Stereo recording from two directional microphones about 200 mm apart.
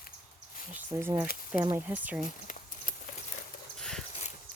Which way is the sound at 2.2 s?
40° left (ahead or behind).